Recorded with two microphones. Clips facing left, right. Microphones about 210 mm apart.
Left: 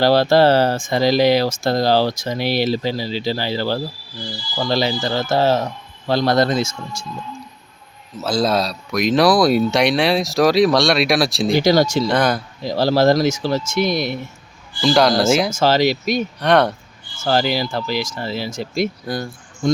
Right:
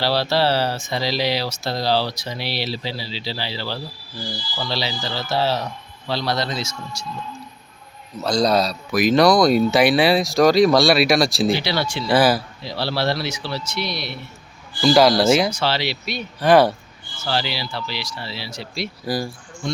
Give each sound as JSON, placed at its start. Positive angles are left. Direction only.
{"t": 0.0, "sound": "speech", "side_deg": 50}
{"t": 8.2, "sound": "speech", "side_deg": 5}
{"t": 11.5, "sound": "speech", "side_deg": 45}
{"t": 12.0, "sound": "speech", "side_deg": -5}
{"t": 12.6, "sound": "speech", "side_deg": 45}
{"t": 14.8, "sound": "speech", "side_deg": 0}
{"t": 15.4, "sound": "speech", "side_deg": 45}
{"t": 16.4, "sound": "speech", "side_deg": -5}
{"t": 17.2, "sound": "speech", "side_deg": 45}
{"t": 19.0, "sound": "speech", "side_deg": -5}
{"t": 19.6, "sound": "speech", "side_deg": 45}